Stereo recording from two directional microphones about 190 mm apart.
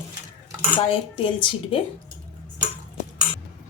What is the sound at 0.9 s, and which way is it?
Speech, 25° left (ahead or behind).